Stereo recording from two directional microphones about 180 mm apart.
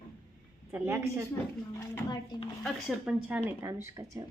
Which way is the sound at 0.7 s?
10° right (ahead or behind).